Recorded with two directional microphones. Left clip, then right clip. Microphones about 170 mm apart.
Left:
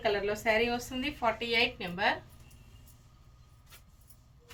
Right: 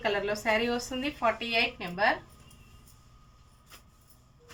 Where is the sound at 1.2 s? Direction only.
20° right (ahead or behind).